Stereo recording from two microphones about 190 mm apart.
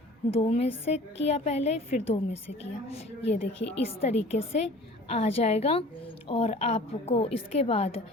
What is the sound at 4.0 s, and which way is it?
A woman's voice, 35° left (ahead or behind).